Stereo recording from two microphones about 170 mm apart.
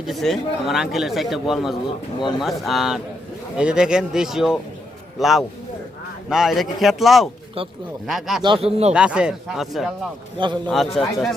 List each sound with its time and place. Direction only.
0.1 s speech: centre (ahead or behind)
8.4 s a man's voice: 35° right (ahead or behind)
8.9 s speech: 5° right (ahead or behind)
10.3 s a man's voice: 25° right (ahead or behind)
10.9 s speech: centre (ahead or behind)